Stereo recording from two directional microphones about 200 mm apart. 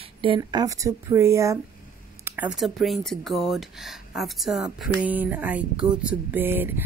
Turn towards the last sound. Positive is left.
turn(degrees=-10)  # may be behind; listen again after turning